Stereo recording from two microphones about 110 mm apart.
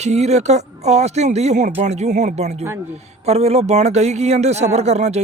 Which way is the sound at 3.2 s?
70° right (ahead or behind).